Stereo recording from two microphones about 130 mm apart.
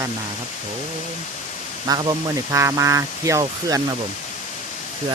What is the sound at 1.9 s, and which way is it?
Speech, 30° right (ahead or behind).